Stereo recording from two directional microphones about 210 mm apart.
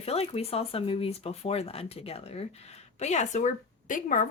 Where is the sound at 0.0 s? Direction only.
30° left (ahead or behind).